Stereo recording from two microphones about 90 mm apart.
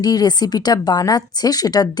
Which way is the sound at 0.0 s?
50° left (ahead or behind).